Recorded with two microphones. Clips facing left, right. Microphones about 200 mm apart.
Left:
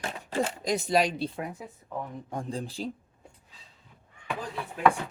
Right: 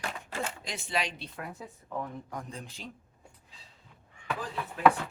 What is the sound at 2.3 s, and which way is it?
Speech, 30° left (ahead or behind).